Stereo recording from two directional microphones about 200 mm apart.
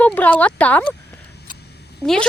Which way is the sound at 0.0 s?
10° left (ahead or behind).